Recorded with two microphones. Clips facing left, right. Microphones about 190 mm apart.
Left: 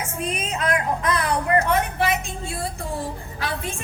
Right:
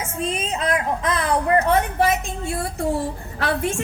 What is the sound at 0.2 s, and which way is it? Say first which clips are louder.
Child singing: right 2 dB; 30° right (ahead or behind).